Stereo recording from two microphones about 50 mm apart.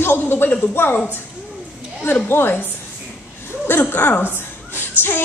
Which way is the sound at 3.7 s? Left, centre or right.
Left.